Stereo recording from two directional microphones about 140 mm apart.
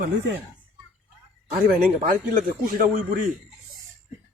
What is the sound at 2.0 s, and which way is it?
Speech, 70° right (ahead or behind).